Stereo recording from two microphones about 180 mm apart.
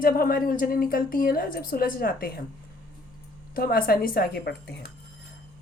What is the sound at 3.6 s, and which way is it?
Speech, 55° left (ahead or behind).